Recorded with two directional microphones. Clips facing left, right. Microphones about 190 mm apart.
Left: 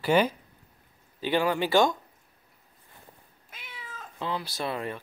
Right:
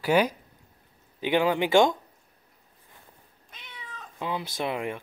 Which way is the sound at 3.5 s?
5° left (ahead or behind).